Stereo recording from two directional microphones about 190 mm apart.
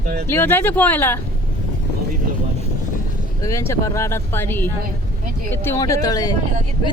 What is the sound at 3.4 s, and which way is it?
Speech, 15° left (ahead or behind).